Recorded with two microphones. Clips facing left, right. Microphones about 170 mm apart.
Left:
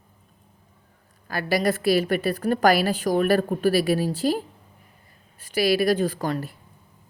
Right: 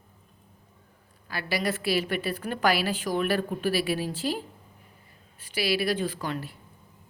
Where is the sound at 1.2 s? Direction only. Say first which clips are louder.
Left 6 dB; 45° left (ahead or behind).